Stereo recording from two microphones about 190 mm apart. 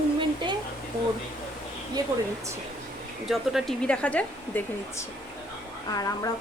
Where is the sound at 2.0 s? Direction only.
20° right (ahead or behind).